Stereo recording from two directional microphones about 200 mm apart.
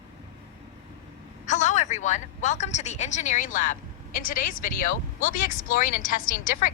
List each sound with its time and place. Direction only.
1.5 s a woman's voice: 35° left (ahead or behind)